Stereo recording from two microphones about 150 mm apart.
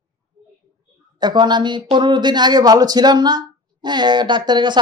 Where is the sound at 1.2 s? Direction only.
30° right (ahead or behind).